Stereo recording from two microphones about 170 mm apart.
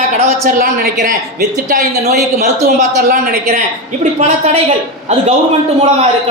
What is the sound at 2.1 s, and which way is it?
A woman's voice, 45° right (ahead or behind).